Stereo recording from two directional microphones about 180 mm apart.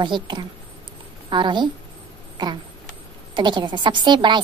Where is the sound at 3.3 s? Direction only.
25° right (ahead or behind).